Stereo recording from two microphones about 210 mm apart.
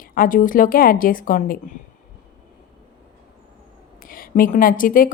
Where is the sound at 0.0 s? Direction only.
40° left (ahead or behind).